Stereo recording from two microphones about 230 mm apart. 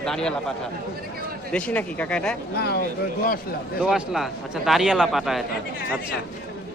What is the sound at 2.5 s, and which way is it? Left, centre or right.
Speech, left.